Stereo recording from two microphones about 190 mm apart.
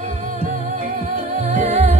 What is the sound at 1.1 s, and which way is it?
Music, 35° right (ahead or behind).